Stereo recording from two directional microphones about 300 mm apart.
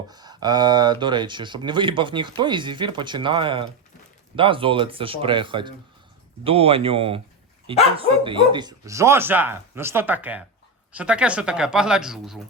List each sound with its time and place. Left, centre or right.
0.1 s speech: centre